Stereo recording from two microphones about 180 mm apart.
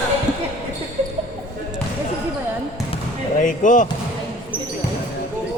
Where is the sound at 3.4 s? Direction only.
45° left (ahead or behind).